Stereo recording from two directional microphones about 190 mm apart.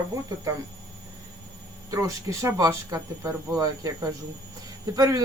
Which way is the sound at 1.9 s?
15° right (ahead or behind).